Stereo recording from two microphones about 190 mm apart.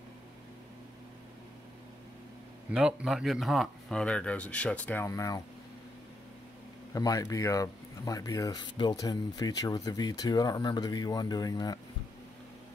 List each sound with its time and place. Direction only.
2.7 s speech: 5° right (ahead or behind); by 5.4 s 15° left (ahead or behind)
6.9 s speech: 20° left (ahead or behind)